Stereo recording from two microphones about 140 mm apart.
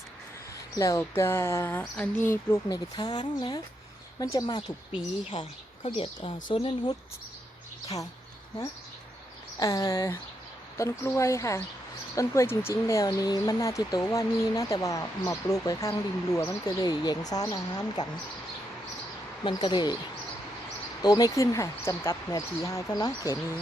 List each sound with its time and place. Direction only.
0.8 s speech: 20° left (ahead or behind)
2.6 s speech: 30° left (ahead or behind)
5.3 s speech: 40° left (ahead or behind)
9.6 s speech: 25° left (ahead or behind)
19.5 s speech: 35° left (ahead or behind)
21.0 s speech: 30° left (ahead or behind)